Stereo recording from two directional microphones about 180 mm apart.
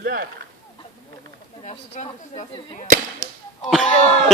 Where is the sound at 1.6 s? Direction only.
35° left (ahead or behind).